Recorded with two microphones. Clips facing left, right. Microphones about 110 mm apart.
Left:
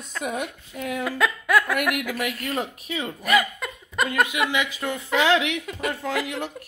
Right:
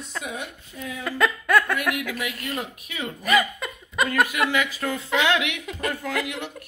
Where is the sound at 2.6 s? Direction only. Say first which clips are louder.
Left 3 dB; 30° left (ahead or behind).